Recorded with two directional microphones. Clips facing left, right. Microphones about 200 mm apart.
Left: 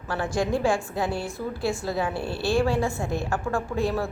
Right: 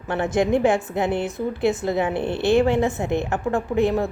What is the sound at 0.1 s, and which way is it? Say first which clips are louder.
A woman's voice: right 5 dB; 20° right (ahead or behind).